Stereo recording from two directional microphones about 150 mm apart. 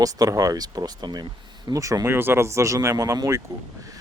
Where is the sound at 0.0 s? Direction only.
25° right (ahead or behind).